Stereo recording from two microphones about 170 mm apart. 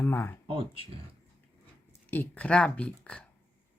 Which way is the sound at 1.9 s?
10° left (ahead or behind).